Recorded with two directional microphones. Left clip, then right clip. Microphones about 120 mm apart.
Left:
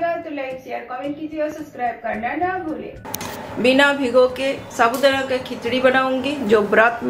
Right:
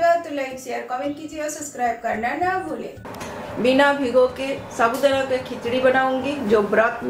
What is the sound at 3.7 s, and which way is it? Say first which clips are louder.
A woman's voice: left 1 dB; 20° left (ahead or behind).